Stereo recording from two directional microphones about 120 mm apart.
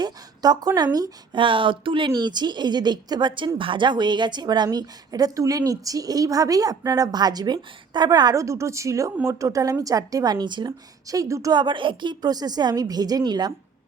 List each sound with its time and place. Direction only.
0.0 s a sound: 35° right (ahead or behind)
0.9 s a woman's voice: 30° right (ahead or behind)
1.4 s a woman's voice: 45° right (ahead or behind); by 11.5 s 25° right (ahead or behind)
11.5 s a woman's voice: 40° right (ahead or behind)